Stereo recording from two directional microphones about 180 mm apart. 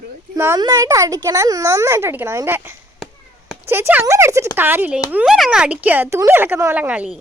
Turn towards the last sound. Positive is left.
turn(degrees=-5)  # may be behind; listen again after turning